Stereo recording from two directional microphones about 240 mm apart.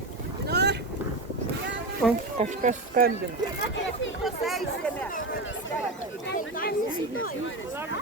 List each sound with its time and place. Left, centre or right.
0.4 s boat: right
2.0 s speech: centre
2.4 s speech: right
4.2 s speech: centre
6.2 s speech: left